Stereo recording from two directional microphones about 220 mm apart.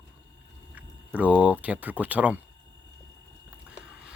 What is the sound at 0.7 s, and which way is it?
Speech, 5° right (ahead or behind).